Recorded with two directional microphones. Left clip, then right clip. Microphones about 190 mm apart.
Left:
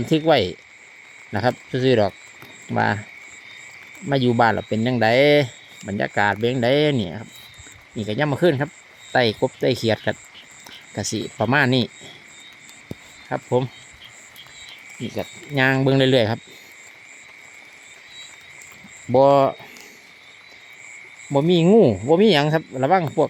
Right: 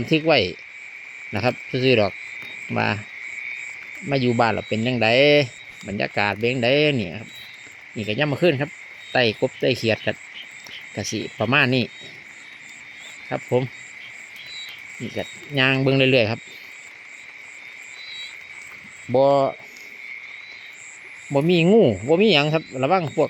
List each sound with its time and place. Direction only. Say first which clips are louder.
0.0 s speech: left 1 dB; 10° left (ahead or behind)
4.1 s speech: left 2 dB; 10° left (ahead or behind)
13.3 s speech: left 1 dB; centre (ahead or behind)
15.1 s speech: even; 5° left (ahead or behind)
19.1 s speech: left 2 dB; 20° left (ahead or behind)
21.3 s speech: left 1 dB; 5° left (ahead or behind)